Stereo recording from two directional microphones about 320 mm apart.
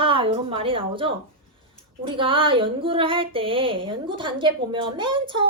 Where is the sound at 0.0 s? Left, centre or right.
Centre.